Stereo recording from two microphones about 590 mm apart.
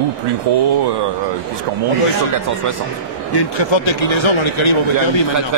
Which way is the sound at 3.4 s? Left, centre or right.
Left.